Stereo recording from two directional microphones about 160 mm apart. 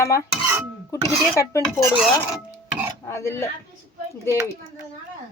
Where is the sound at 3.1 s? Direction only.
15° left (ahead or behind).